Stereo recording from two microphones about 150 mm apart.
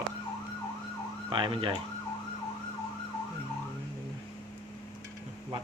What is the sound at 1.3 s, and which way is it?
Speech, 35° right (ahead or behind).